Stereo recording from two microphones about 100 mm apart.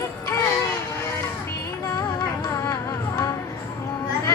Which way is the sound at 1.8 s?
30° left (ahead or behind).